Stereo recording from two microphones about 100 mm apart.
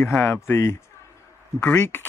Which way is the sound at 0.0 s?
25° left (ahead or behind).